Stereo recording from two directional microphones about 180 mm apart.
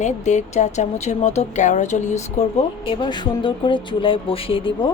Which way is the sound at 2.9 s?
25° left (ahead or behind).